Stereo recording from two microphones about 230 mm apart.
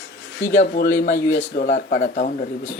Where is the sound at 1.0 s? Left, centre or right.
Left.